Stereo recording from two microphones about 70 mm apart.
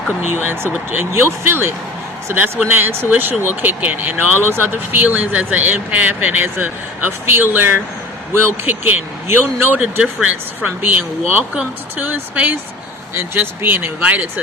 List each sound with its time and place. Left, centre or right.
0.3 s speech: right
10.0 s speech: centre
10.8 s speech: right